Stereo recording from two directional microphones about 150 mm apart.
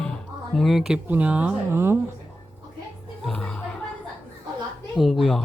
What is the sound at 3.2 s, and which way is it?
Music, 5° left (ahead or behind).